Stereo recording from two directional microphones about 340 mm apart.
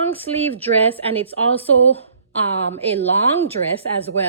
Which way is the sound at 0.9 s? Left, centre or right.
Centre.